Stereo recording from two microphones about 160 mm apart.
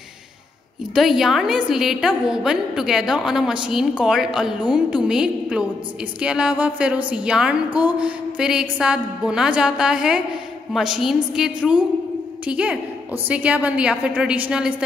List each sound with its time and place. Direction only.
0.9 s a woman's voice: centre (ahead or behind)